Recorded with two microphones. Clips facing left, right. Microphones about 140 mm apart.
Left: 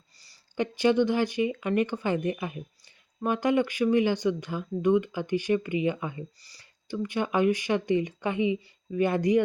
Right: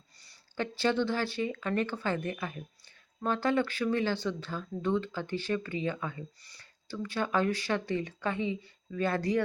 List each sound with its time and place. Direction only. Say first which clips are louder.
0.5 s speech: left 6 dB; 15° left (ahead or behind)